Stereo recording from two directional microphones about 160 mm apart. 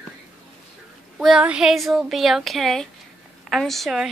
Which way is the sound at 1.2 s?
5° right (ahead or behind).